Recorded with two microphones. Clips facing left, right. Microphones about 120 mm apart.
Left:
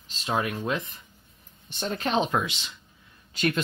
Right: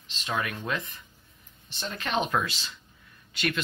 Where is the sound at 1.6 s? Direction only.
50° left (ahead or behind).